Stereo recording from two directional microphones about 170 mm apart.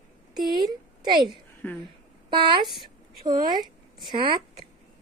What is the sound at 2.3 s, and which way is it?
Speech, 30° right (ahead or behind).